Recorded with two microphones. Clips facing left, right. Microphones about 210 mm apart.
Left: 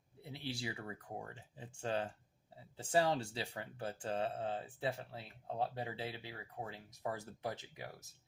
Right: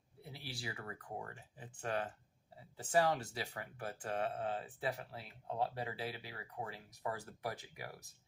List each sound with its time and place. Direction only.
0.2 s speech: 25° left (ahead or behind)